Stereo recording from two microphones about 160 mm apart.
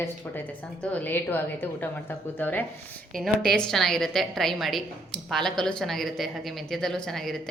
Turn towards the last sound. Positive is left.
turn(degrees=0)  # may be behind; listen again after turning